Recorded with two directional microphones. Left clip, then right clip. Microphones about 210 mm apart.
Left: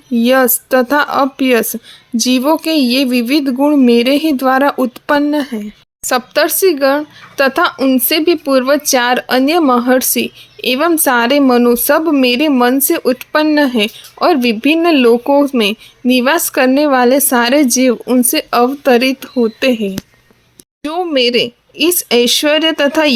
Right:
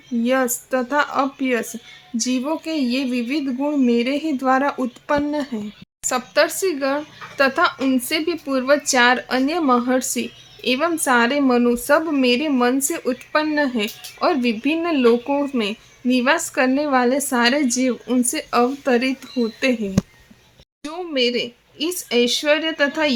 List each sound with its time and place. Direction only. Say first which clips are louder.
0.2 s speech: left 9 dB; 40° left (ahead or behind)
20.8 s speech: left 8 dB; 30° left (ahead or behind)